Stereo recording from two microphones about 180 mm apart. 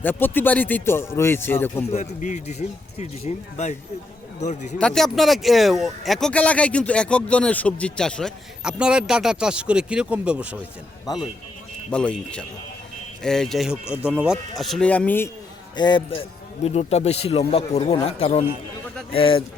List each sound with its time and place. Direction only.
0.0 s speech: 10° left (ahead or behind)
1.9 s speech: 40° left (ahead or behind)
4.8 s speech: 5° left (ahead or behind)
11.1 s speech: 20° left (ahead or behind)
11.9 s speech: 5° left (ahead or behind)
15.7 s speech: 25° left (ahead or behind)